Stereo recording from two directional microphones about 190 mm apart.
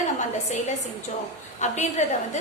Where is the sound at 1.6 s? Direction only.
35° left (ahead or behind).